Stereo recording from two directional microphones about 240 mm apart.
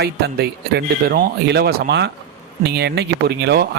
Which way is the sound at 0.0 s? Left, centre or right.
Right.